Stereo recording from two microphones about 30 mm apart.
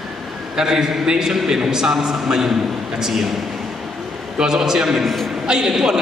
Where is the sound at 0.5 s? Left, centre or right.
Centre.